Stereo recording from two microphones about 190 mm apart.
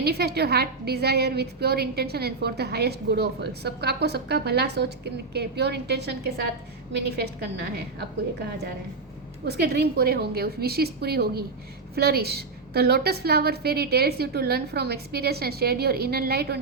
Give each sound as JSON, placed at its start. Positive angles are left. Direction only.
{"t": 0.0, "sound": "a woman's voice", "side_deg": -60}
{"t": 9.5, "sound": "a woman's voice", "side_deg": -60}